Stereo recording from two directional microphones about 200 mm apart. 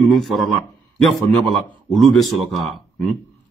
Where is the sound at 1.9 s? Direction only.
Centre (ahead or behind).